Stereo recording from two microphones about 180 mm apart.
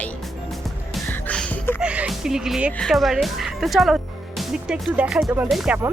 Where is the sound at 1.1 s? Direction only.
5° left (ahead or behind).